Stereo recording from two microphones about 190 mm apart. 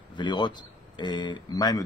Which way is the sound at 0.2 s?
25° left (ahead or behind).